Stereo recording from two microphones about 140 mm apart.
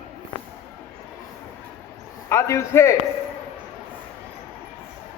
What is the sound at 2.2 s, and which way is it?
Speech, 20° left (ahead or behind).